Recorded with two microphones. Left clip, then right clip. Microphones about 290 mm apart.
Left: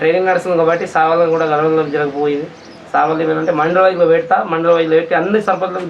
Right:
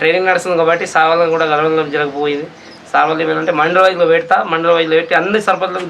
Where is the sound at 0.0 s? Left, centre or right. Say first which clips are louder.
Right 1 dB; centre.